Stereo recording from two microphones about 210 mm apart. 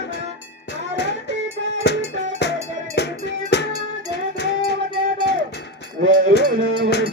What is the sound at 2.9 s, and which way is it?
Music, 55° left (ahead or behind).